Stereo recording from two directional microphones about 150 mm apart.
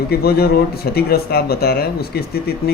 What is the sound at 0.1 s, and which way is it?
Speech, 90° left.